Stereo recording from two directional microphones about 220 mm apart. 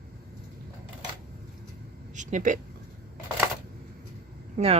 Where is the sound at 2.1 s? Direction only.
35° right (ahead or behind).